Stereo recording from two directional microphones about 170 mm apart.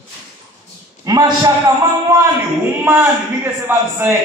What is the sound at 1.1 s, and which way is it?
A man's voice, 20° right (ahead or behind).